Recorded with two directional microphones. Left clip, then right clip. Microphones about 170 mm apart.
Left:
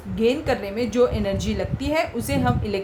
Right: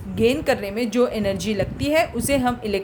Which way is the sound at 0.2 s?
45° right (ahead or behind).